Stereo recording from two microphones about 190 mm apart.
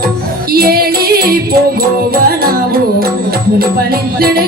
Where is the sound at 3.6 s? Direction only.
55° right (ahead or behind).